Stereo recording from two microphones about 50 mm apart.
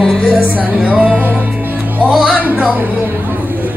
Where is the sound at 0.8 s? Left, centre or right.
Right.